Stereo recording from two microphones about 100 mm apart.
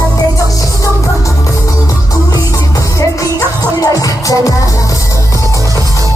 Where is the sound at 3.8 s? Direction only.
35° left (ahead or behind).